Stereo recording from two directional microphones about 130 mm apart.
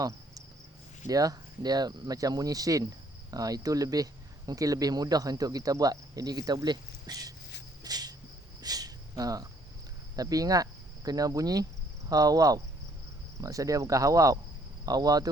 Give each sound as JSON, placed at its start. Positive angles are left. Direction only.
{"t": 1.0, "sound": "speech", "side_deg": -30}
{"t": 7.9, "sound": "cricket", "side_deg": -30}
{"t": 8.6, "sound": "a sound", "side_deg": -30}
{"t": 10.2, "sound": "speech", "side_deg": -30}